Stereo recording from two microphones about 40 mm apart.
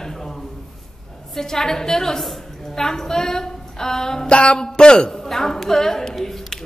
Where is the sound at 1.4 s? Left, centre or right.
Centre.